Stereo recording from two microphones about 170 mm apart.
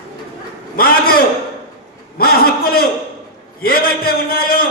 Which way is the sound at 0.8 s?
60° left (ahead or behind).